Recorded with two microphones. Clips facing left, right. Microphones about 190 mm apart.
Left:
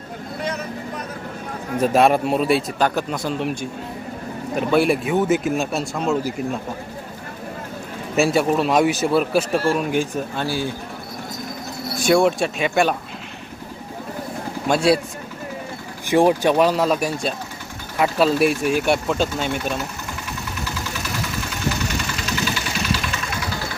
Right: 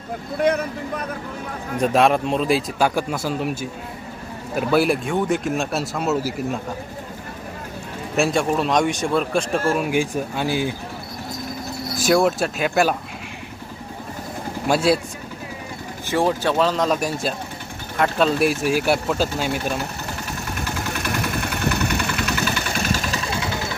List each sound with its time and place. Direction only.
0.4 s speech: 55° right (ahead or behind)
1.8 s speech: 5° left (ahead or behind)
8.1 s speech: 5° left (ahead or behind)
9.7 s speech: 10° right (ahead or behind)
11.9 s speech: centre (ahead or behind)
14.7 s speech: centre (ahead or behind)
16.0 s speech: 15° left (ahead or behind); by 19.5 s 5° right (ahead or behind)
20.6 s vehicle: 55° right (ahead or behind)
23.2 s vehicle: 30° right (ahead or behind)